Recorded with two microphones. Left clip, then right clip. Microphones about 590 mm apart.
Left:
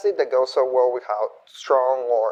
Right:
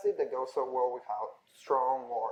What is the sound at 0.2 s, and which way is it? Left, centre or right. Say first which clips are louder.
Speech: left 13 dB; left.